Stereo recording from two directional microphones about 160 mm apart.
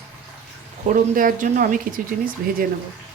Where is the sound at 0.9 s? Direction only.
55° right (ahead or behind).